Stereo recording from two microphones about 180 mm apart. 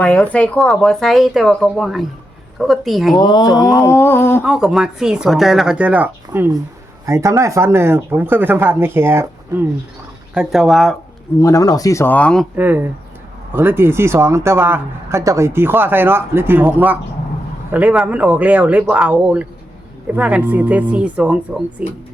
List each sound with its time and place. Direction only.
0.0 s speech: 10° left (ahead or behind)
3.2 s speech: 25° left (ahead or behind)
4.4 s speech: 5° right (ahead or behind)
10.3 s speech: 5° right (ahead or behind)
11.3 s speech: 20° left (ahead or behind)
12.5 s speech: 10° right (ahead or behind)